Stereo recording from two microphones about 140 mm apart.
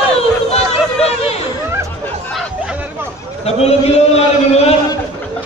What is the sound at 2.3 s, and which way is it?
Hubbub, 5° right (ahead or behind).